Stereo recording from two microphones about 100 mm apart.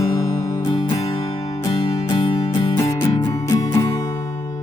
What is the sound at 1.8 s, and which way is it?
Music, 60° left (ahead or behind).